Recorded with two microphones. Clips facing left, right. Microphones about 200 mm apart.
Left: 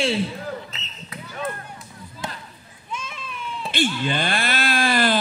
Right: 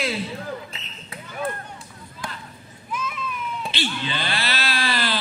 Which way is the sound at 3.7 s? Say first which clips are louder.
Left 8 dB; 50° left (ahead or behind).